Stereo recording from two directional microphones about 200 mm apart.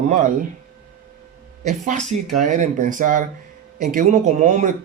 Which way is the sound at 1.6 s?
40° right (ahead or behind).